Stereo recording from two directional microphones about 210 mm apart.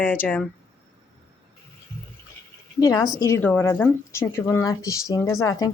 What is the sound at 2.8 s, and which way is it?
A woman's voice, 15° left (ahead or behind).